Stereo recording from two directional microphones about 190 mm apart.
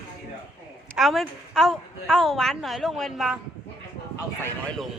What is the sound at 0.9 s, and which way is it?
A woman's voice, centre (ahead or behind).